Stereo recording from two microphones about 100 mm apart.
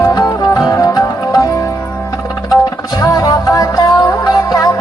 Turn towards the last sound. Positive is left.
turn(degrees=35)  # may be behind; listen again after turning